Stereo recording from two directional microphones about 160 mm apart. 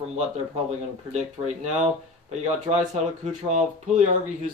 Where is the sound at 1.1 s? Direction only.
45° right (ahead or behind).